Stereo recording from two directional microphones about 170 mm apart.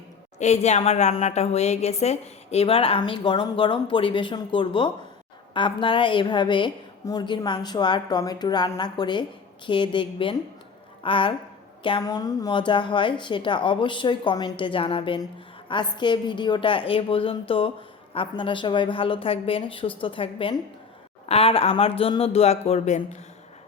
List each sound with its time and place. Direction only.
0.3 s a woman's voice: 40° left (ahead or behind)